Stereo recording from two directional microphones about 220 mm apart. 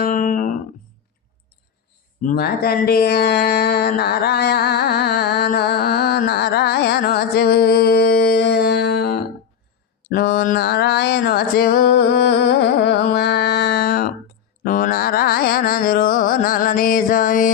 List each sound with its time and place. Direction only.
0.0 s music: 35° left (ahead or behind)
2.2 s a sound: 45° left (ahead or behind)
10.1 s music: 45° left (ahead or behind)